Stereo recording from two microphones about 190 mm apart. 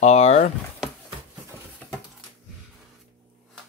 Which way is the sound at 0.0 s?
35° left (ahead or behind).